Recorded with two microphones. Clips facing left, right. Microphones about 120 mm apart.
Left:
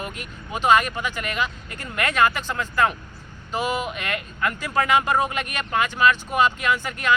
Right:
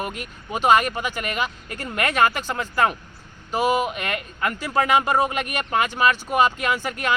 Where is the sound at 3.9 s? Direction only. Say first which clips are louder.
Right 1 dB; 45° right (ahead or behind).